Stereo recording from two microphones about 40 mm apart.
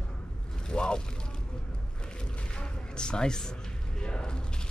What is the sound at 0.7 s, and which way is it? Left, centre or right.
Speech, left.